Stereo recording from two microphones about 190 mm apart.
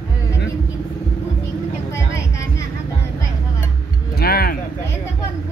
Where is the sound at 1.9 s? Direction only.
15° left (ahead or behind).